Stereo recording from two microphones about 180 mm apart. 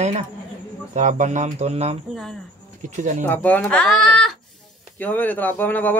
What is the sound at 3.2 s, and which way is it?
Speech, 10° left (ahead or behind).